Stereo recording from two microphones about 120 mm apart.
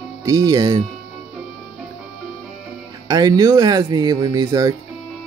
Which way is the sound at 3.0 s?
35° right (ahead or behind).